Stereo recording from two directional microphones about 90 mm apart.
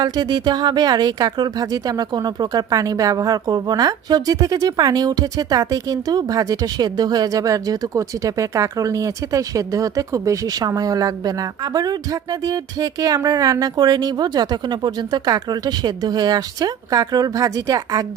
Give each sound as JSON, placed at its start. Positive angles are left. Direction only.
{"t": 0.0, "sound": "speech", "side_deg": -50}